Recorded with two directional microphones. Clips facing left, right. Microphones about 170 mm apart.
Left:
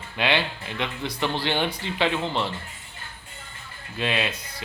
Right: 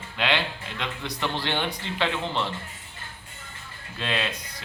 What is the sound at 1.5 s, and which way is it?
Speech, 10° left (ahead or behind).